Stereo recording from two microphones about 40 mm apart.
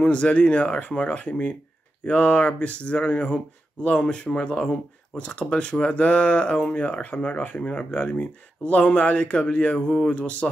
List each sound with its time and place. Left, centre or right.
0.1 s speech: left